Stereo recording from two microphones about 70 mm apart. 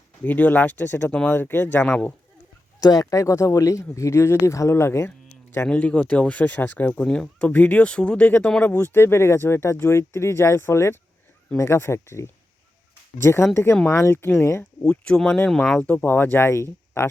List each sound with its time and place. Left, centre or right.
0.2 s speech: left
2.8 s speech: left
5.6 s speech: centre
7.0 s speech: centre
8.6 s speech: left
14.6 s speech: centre; by 17.1 s left